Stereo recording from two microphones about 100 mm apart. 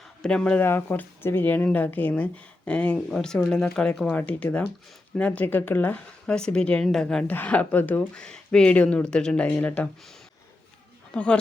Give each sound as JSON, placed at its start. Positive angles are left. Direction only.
{"t": 0.0, "sound": "a sound", "side_deg": 10}
{"t": 0.6, "sound": "speech", "side_deg": 25}
{"t": 11.1, "sound": "a man's voice", "side_deg": 10}